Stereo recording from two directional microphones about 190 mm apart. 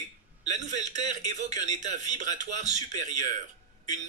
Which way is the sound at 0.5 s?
40° right (ahead or behind).